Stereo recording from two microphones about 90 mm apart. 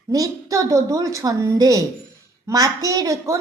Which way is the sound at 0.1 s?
40° right (ahead or behind).